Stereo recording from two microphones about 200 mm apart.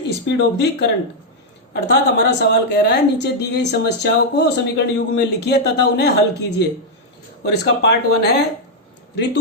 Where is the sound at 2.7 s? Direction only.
55° left (ahead or behind).